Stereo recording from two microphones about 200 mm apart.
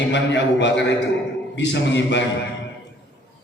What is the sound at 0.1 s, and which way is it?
A man's voice, 65° left (ahead or behind).